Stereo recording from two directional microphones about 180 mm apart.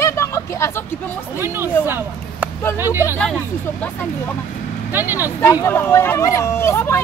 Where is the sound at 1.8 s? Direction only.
10° right (ahead or behind).